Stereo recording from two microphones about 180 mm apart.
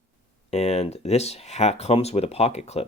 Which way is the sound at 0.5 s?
35° left (ahead or behind).